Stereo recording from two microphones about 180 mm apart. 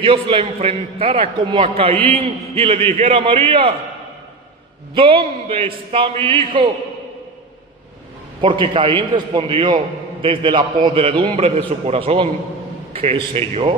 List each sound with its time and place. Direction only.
0.0 s a man's voice: 30° right (ahead or behind)
4.9 s a man's voice: 30° right (ahead or behind)
8.4 s a man's voice: 30° right (ahead or behind)